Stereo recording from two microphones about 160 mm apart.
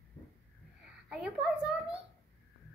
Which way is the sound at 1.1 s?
5° right (ahead or behind).